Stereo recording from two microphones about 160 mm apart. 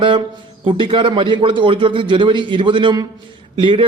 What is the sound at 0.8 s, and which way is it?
Speech, 30° right (ahead or behind).